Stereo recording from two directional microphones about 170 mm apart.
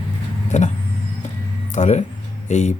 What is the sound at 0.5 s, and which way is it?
Speech, 45° left (ahead or behind).